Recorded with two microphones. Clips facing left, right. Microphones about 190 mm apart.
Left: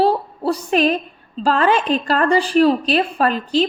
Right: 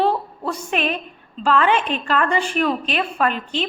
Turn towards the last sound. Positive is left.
turn(degrees=35)  # may be behind; listen again after turning